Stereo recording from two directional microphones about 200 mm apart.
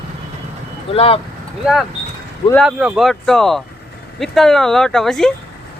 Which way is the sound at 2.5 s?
5° right (ahead or behind).